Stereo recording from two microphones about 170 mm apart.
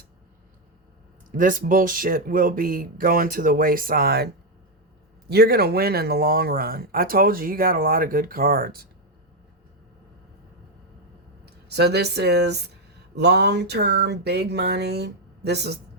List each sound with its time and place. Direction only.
1.4 s speech: 50° right (ahead or behind)
5.3 s speech: 65° right (ahead or behind)
11.7 s a sound: 75° right (ahead or behind)